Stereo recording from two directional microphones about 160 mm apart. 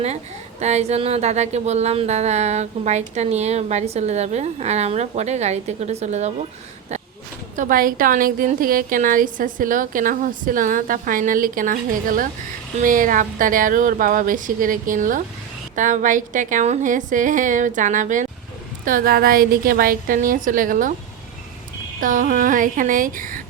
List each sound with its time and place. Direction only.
0.6 s speech: 45° right (ahead or behind)
7.5 s a woman's voice: 55° right (ahead or behind)
22.0 s a woman's voice: 55° right (ahead or behind)